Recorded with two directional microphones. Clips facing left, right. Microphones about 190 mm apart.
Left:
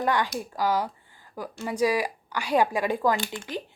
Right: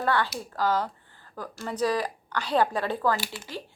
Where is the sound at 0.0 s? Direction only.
15° left (ahead or behind).